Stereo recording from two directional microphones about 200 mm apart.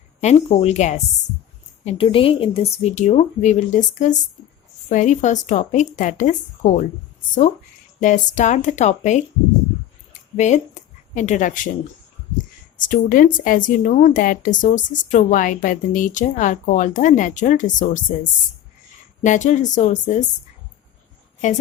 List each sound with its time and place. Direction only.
0.2 s speech: 35° left (ahead or behind)
8.0 s speech: 40° left (ahead or behind)
10.3 s speech: 35° left (ahead or behind)
12.7 s speech: 40° left (ahead or behind)
19.2 s speech: 40° left (ahead or behind)